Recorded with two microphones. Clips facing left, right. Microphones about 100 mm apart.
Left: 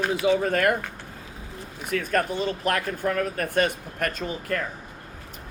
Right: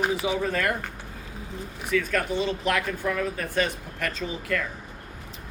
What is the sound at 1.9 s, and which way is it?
Speech, 45° left (ahead or behind).